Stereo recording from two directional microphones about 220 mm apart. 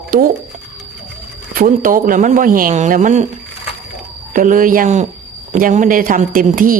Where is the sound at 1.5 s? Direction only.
40° right (ahead or behind).